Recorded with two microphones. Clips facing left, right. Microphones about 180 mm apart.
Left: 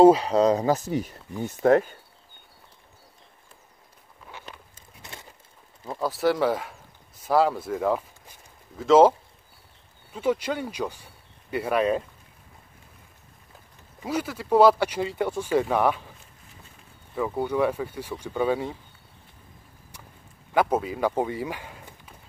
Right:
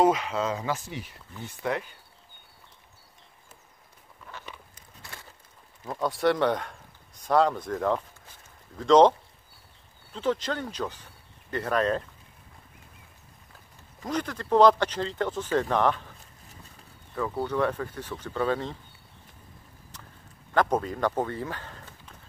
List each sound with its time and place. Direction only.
0.0 s speech: 35° left (ahead or behind)
4.7 s a sound: 20° left (ahead or behind)
5.9 s speech: 5° left (ahead or behind)
10.1 s speech: 10° left (ahead or behind)
14.0 s speech: 5° left (ahead or behind)
17.1 s speech: 15° left (ahead or behind)
20.5 s speech: 5° left (ahead or behind)